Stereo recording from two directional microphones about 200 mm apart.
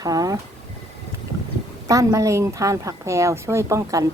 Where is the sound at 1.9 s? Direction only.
15° right (ahead or behind).